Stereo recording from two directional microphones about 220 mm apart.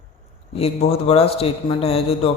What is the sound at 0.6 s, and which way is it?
A man's voice, 25° left (ahead or behind).